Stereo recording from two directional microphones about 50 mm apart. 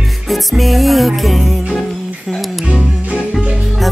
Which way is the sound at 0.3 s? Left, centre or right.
Centre.